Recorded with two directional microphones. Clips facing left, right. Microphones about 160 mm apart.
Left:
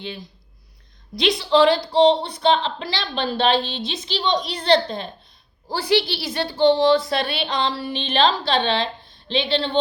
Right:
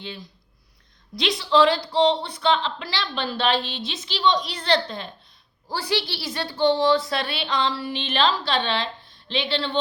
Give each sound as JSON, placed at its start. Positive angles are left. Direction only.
{"t": 1.3, "sound": "a woman's voice", "side_deg": 15}